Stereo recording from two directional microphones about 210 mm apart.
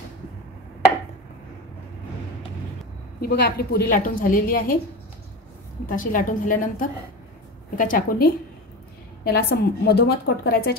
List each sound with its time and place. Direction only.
3.2 s a woman's voice: 50° left (ahead or behind)
5.9 s a woman's voice: 40° left (ahead or behind)